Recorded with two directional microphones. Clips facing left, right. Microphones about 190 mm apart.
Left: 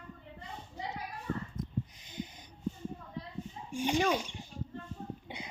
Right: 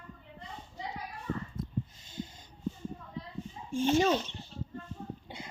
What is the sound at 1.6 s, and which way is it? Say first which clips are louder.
Snort: right 1 dB; 20° left (ahead or behind).